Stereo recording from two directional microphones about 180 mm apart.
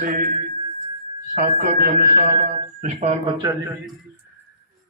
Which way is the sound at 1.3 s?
55° right (ahead or behind).